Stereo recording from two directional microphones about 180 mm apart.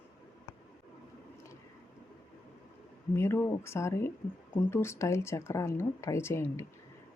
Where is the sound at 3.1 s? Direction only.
15° left (ahead or behind).